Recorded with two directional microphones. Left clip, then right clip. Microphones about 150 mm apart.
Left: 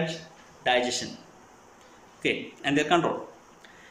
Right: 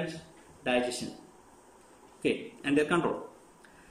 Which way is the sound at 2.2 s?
15° right (ahead or behind).